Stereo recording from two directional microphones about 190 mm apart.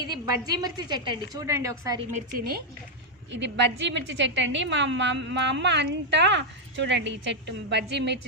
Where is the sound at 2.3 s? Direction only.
55° right (ahead or behind).